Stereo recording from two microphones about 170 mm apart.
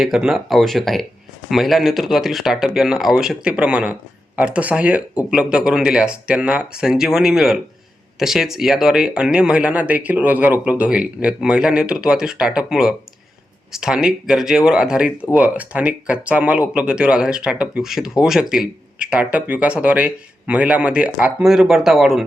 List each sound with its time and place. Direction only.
0.0 s speech: 5° right (ahead or behind)